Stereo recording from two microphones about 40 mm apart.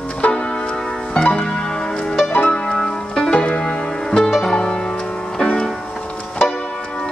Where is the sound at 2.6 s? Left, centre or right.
Left.